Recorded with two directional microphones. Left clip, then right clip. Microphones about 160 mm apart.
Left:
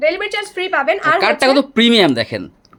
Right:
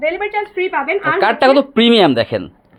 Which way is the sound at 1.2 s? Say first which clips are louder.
Right 2 dB; 10° left (ahead or behind).